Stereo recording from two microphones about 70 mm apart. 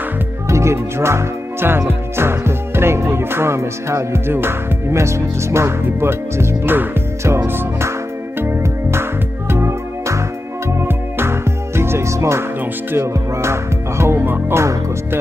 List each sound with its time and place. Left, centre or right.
0.5 s speech: right
1.9 s music: right